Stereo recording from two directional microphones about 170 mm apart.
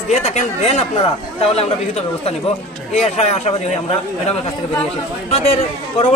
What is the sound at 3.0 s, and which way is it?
Speech, 40° left (ahead or behind).